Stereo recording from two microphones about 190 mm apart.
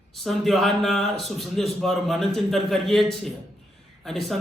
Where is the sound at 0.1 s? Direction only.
Centre (ahead or behind).